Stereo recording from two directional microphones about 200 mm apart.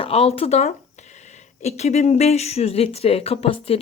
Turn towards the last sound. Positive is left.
turn(degrees=30)  # may be behind; listen again after turning